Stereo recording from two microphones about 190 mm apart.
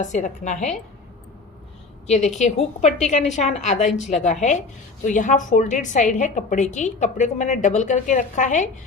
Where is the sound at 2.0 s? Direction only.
35° left (ahead or behind).